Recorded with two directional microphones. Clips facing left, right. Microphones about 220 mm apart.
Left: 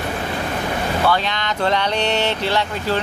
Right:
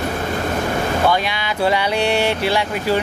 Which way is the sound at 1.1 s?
10° right (ahead or behind).